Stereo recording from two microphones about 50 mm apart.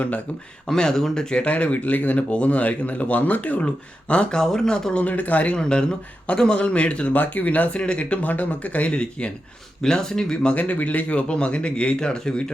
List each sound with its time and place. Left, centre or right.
0.7 s speech: centre
1.5 s speech: left
5.0 s speech: left
5.5 s speech: centre
10.5 s speech: left